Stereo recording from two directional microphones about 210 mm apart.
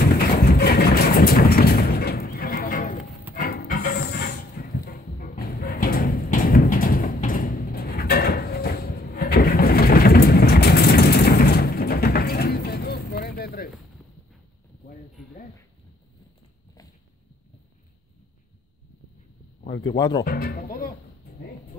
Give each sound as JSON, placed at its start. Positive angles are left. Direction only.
{"t": 0.0, "sound": "vehicle", "side_deg": 50}
{"t": 3.3, "sound": "music", "side_deg": 40}
{"t": 19.6, "sound": "speech", "side_deg": 20}
{"t": 20.2, "sound": "speech", "side_deg": 45}